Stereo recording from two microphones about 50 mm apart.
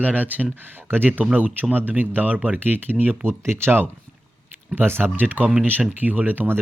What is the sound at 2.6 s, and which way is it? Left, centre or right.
Speech, right.